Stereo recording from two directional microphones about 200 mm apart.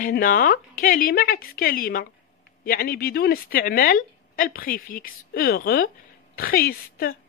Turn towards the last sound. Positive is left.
turn(degrees=50)  # may be behind; listen again after turning